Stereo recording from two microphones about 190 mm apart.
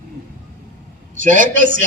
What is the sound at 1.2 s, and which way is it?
Speech, 45° right (ahead or behind).